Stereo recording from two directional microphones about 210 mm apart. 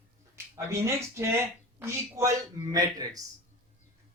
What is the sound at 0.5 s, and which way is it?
Speech, 15° right (ahead or behind).